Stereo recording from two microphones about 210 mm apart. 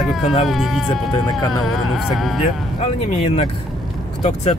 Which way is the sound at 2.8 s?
30° left (ahead or behind).